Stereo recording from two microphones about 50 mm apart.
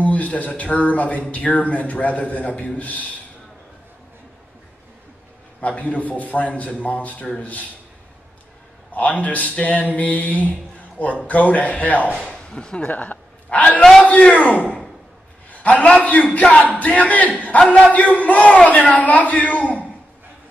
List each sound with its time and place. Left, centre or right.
0.0 s a man's voice: left
5.6 s a man's voice: left
8.9 s a man's voice: left
12.3 s speech: centre
12.9 s a sound: left
14.3 s a man's voice: left
17.6 s a man's voice: centre
17.9 s a man's voice: left